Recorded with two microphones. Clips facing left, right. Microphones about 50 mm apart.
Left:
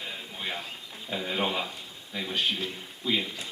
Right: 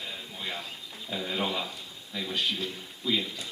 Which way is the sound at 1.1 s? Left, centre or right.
Centre.